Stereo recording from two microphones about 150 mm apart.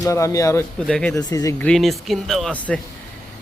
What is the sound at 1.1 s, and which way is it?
Speech, 20° left (ahead or behind).